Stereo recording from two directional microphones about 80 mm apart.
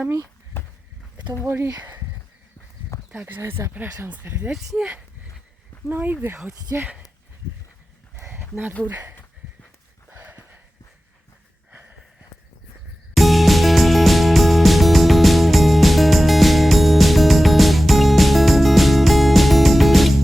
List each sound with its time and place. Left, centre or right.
0.5 s walk: left
1.5 s speech: right
3.1 s speech: centre
4.5 s speech: centre
5.9 s speech: right
8.9 s speech: right
10.1 s a sound: right
13.1 s music: centre